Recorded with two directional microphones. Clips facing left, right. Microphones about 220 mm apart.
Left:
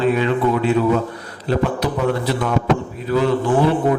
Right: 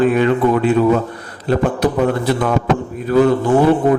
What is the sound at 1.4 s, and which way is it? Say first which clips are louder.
A man's voice: right 4 dB; 50° right (ahead or behind).